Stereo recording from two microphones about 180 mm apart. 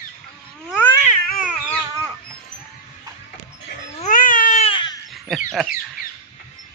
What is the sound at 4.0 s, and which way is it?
Baby cry, 45° left (ahead or behind).